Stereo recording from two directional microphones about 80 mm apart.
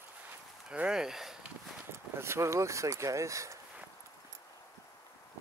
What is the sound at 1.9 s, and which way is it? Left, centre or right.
Speech, right.